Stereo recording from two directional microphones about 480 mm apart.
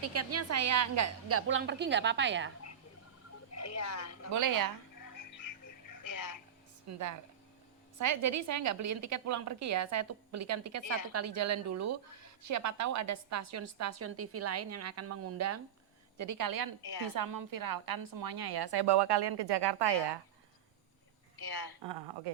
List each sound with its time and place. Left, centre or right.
0.0 s a woman's voice: right
3.5 s a sound: left
4.3 s a woman's voice: right
4.9 s music: left
6.8 s a woman's voice: right
16.8 s a woman's voice: left
17.2 s a woman's voice: right
21.3 s a woman's voice: left